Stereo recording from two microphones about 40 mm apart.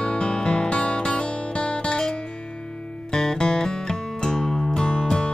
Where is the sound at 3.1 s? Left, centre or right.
Centre.